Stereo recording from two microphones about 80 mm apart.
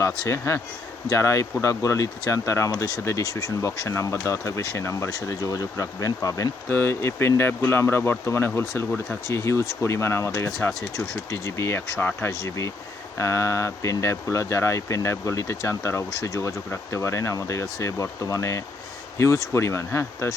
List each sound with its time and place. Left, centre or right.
0.3 s speech: left
6.7 s speech: left
10.7 s speech: centre
11.3 s speech: left
11.9 s speech: left
12.3 s speech: left